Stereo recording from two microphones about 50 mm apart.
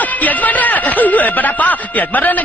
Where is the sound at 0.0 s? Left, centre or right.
Left.